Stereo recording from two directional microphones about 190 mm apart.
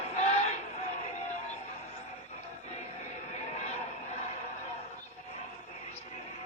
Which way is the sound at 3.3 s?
35° left (ahead or behind).